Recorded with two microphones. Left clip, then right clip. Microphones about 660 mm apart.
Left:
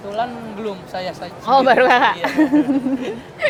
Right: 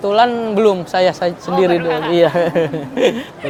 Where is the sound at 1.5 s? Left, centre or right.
Left.